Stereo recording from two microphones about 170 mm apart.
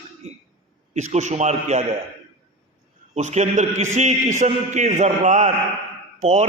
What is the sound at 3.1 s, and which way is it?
A man's voice, 40° right (ahead or behind).